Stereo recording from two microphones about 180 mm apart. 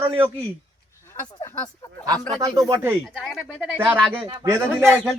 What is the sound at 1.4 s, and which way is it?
Speech, 15° left (ahead or behind).